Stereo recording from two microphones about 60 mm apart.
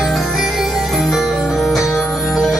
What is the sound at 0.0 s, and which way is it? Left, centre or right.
Music, centre.